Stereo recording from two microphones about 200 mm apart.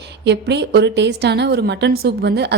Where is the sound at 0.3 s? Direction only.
60° right (ahead or behind).